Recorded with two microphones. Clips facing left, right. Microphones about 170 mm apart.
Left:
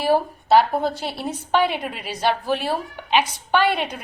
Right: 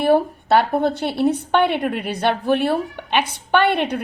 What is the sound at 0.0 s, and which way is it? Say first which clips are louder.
A woman's voice: right 4 dB; 60° right (ahead or behind).